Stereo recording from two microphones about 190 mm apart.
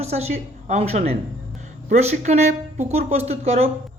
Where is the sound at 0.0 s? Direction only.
35° right (ahead or behind).